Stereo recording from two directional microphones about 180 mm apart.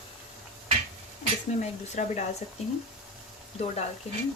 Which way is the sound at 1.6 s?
40° left (ahead or behind).